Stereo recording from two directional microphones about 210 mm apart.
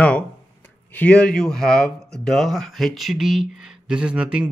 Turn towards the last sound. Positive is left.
turn(degrees=-5)  # may be behind; listen again after turning